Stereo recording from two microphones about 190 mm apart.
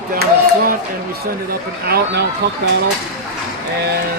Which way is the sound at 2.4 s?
65° right (ahead or behind).